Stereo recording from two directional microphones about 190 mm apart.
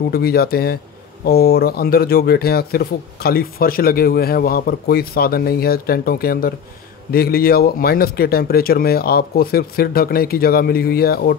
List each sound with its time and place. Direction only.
0.1 s a man's voice: 55° left (ahead or behind)